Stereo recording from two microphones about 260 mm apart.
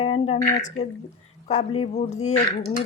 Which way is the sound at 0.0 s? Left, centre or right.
Left.